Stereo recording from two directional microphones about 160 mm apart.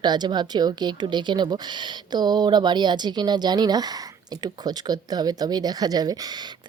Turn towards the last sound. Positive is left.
turn(degrees=-25)  # may be behind; listen again after turning